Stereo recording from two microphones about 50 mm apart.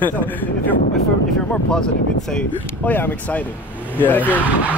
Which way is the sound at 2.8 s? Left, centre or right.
Left.